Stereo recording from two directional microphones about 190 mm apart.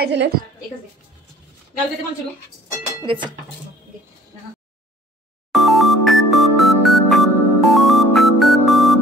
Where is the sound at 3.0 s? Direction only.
25° right (ahead or behind).